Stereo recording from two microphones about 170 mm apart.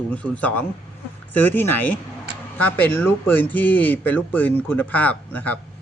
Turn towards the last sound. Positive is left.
turn(degrees=10)  # may be behind; listen again after turning